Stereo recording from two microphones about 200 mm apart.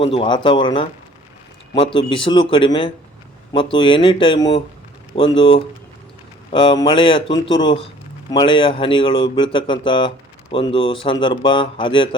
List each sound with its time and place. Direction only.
0.0 s speech: 25° left (ahead or behind)